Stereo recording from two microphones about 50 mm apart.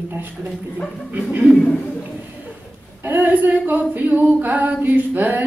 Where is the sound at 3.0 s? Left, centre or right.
Right.